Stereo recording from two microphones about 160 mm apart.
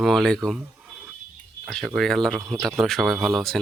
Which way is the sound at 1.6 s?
5° right (ahead or behind).